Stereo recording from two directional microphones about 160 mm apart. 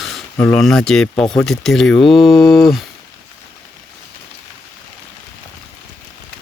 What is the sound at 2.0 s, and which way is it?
Mantra, 35° left (ahead or behind).